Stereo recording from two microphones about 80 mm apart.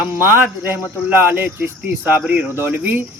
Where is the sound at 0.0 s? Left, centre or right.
Right.